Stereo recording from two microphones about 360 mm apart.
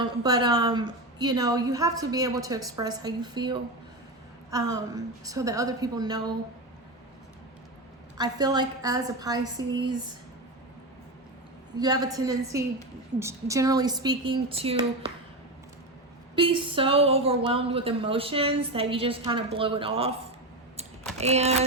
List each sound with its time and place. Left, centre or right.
0.0 s speech: centre
8.2 s speech: centre
11.8 s speech: centre
16.3 s speech: centre
21.2 s speech: centre